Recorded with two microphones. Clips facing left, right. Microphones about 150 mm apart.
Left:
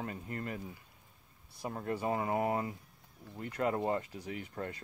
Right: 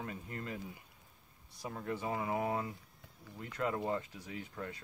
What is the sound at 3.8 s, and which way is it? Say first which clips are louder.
Speech: left 3 dB; 45° left (ahead or behind).